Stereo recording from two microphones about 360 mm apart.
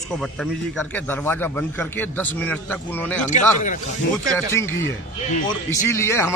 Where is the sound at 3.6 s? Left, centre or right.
Left.